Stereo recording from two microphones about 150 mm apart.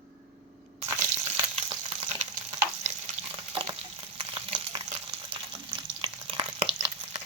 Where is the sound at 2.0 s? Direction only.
45° right (ahead or behind).